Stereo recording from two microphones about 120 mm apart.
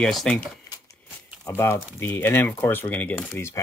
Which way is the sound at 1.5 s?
20° left (ahead or behind).